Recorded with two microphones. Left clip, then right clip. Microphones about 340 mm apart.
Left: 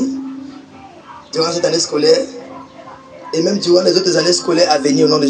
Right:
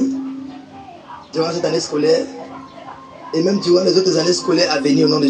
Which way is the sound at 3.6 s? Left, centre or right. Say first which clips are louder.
Left 2 dB; left.